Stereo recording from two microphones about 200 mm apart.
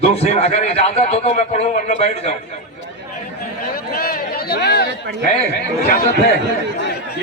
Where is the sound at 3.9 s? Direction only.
50° left (ahead or behind).